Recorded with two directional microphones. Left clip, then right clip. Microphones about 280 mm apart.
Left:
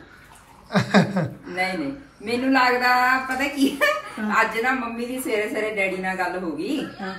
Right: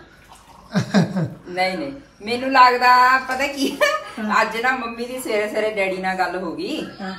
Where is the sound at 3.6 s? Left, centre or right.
Centre.